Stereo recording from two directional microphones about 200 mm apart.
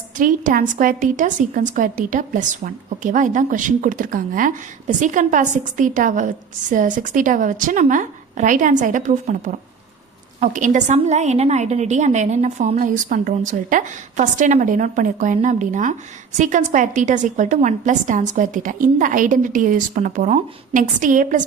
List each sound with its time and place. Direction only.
0.2 s a woman's voice: 40° right (ahead or behind)